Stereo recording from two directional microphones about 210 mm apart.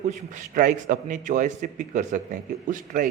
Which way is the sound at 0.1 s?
40° right (ahead or behind).